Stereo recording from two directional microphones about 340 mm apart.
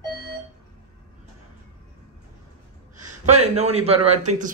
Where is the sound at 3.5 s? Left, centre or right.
Centre.